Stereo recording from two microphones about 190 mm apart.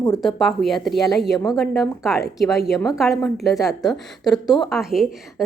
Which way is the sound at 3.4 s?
Centre (ahead or behind).